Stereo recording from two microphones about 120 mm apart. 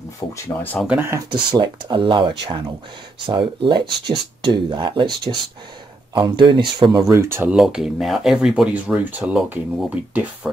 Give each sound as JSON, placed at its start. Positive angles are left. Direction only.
{"t": 0.2, "sound": "speech", "side_deg": 35}
{"t": 0.8, "sound": "speech", "side_deg": -15}
{"t": 1.3, "sound": "speech", "side_deg": -40}
{"t": 7.1, "sound": "speech", "side_deg": -20}
{"t": 7.5, "sound": "speech", "side_deg": -5}